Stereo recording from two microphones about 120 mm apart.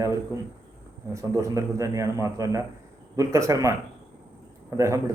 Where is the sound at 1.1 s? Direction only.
25° right (ahead or behind).